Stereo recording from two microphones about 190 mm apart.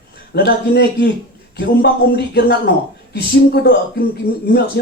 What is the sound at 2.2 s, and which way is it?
A man's voice, 60° left (ahead or behind).